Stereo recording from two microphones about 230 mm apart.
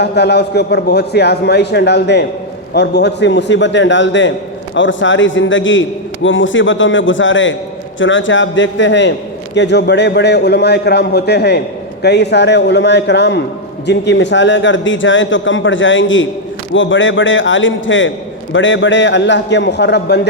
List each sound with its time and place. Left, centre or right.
0.0 s a man's voice: left